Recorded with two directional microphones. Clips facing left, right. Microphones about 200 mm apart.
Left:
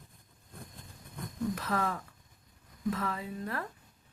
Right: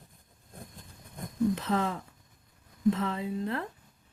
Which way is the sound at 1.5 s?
25° right (ahead or behind).